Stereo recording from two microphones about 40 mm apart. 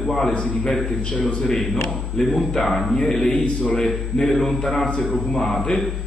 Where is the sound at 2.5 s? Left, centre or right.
Centre.